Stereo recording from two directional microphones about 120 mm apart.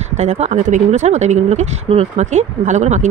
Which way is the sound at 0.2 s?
75° right (ahead or behind).